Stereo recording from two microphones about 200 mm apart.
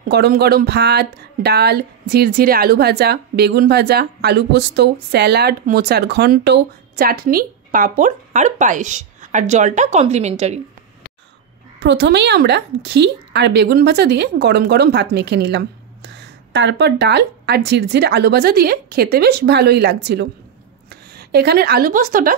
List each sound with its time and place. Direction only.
0.1 s speech: 55° right (ahead or behind); by 10.6 s 35° right (ahead or behind)
11.8 s a woman's voice: 60° right (ahead or behind)